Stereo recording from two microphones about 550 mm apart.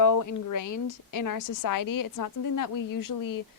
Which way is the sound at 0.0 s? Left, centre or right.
Left.